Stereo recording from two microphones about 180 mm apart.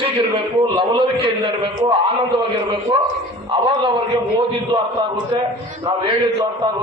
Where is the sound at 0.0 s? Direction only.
30° right (ahead or behind).